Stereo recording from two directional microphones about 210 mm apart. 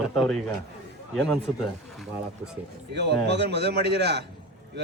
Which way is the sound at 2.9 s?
55° right (ahead or behind).